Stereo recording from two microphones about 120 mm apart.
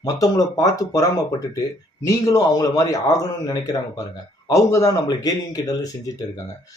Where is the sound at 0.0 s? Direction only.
30° left (ahead or behind).